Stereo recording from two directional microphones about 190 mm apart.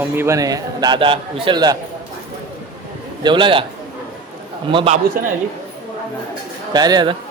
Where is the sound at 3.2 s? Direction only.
25° right (ahead or behind).